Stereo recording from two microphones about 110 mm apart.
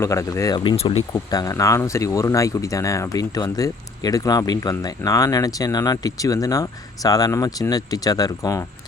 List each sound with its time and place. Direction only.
0.0 s speech: 25° left (ahead or behind)
0.8 s speech: 65° left (ahead or behind)
1.1 s speech: 35° left (ahead or behind)